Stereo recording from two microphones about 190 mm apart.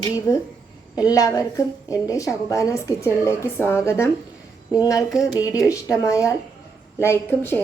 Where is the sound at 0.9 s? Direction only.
20° left (ahead or behind).